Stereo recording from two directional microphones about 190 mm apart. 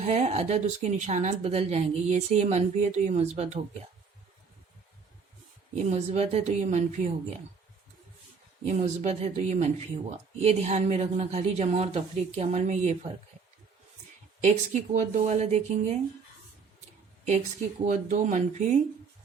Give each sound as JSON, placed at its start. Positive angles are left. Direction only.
{"t": 0.0, "sound": "speech", "side_deg": -35}
{"t": 5.7, "sound": "speech", "side_deg": -35}
{"t": 8.6, "sound": "speech", "side_deg": -35}
{"t": 14.4, "sound": "speech", "side_deg": -40}
{"t": 17.2, "sound": "speech", "side_deg": -40}